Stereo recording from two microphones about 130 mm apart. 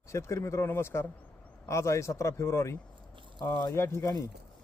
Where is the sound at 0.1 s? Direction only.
20° left (ahead or behind).